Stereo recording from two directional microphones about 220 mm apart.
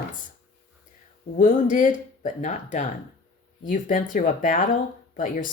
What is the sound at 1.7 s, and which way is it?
Speech, 35° left (ahead or behind).